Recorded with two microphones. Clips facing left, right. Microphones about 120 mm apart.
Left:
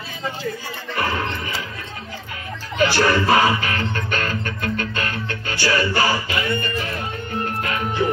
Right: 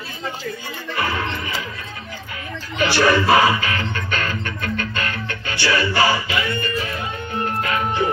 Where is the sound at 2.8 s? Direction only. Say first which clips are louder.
Right 1 dB; 40° left (ahead or behind).